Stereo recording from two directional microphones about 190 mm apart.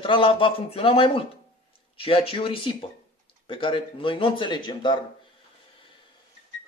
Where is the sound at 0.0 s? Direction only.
25° left (ahead or behind).